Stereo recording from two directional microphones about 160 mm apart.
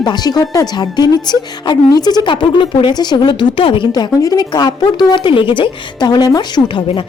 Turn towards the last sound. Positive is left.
turn(degrees=30)  # may be behind; listen again after turning